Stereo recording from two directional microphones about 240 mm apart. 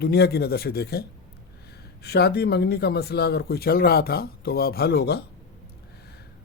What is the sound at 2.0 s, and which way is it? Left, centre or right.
Speech, left.